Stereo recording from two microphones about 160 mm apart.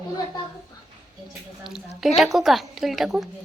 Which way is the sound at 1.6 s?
Centre (ahead or behind).